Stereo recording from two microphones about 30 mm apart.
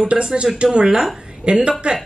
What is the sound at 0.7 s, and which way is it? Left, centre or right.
A woman's voice, right.